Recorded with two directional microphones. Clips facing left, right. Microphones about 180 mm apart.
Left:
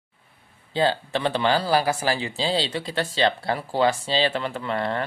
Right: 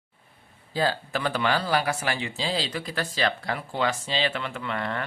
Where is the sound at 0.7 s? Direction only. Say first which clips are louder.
Left 4 dB; 25° left (ahead or behind).